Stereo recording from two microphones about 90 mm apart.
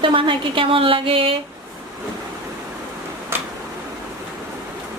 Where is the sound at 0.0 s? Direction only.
75° right (ahead or behind); by 1.3 s 90° right.